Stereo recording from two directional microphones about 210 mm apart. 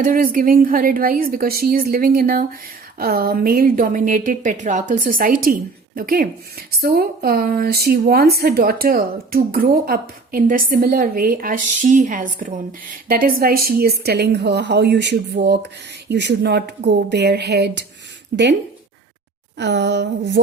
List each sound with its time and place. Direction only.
0.0 s a woman's voice: 40° right (ahead or behind)
19.5 s speech: 55° right (ahead or behind)